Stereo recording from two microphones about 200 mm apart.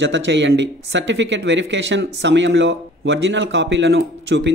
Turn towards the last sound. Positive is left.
turn(degrees=-65)  # may be behind; listen again after turning